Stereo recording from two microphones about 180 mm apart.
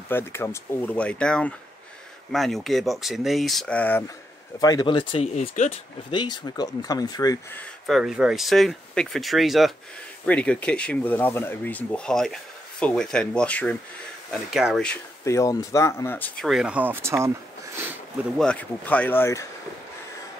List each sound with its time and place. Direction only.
0.1 s speech: 15° left (ahead or behind)
4.6 s speech: 20° left (ahead or behind)
7.8 s speech: centre (ahead or behind)
15.2 s speech: 15° left (ahead or behind)
16.4 s speech: 5° right (ahead or behind)
18.4 s speech: 5° left (ahead or behind)